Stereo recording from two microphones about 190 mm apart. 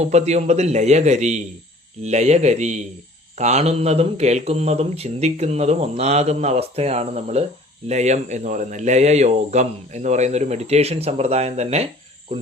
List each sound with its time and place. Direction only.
0.0 s speech: 35° right (ahead or behind)